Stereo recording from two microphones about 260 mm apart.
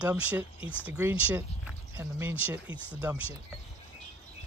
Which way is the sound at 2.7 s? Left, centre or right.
Centre.